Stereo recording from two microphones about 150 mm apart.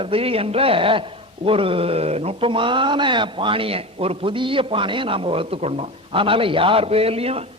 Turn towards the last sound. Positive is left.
turn(degrees=-40)  # may be behind; listen again after turning